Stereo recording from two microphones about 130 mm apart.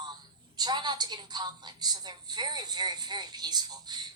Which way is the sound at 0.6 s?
35° right (ahead or behind).